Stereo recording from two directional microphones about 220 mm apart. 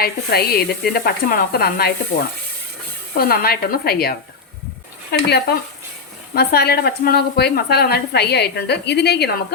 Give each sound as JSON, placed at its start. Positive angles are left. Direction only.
{"t": 0.0, "sound": "a woman's voice", "side_deg": 45}
{"t": 5.1, "sound": "a woman's voice", "side_deg": 45}
{"t": 6.3, "sound": "a woman's voice", "side_deg": 45}